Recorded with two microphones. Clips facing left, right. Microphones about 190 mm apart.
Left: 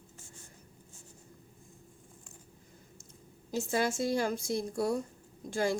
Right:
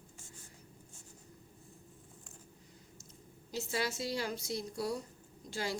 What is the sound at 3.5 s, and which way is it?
Speech, 50° left (ahead or behind).